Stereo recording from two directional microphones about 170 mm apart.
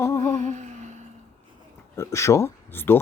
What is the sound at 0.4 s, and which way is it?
Humming, 45° right (ahead or behind).